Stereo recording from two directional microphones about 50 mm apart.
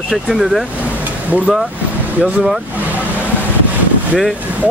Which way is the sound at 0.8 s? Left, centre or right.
Right.